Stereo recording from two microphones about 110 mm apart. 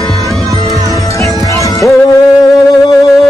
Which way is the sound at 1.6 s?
30° left (ahead or behind).